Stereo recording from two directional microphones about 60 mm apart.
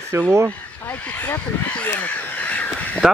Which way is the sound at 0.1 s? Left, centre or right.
Right.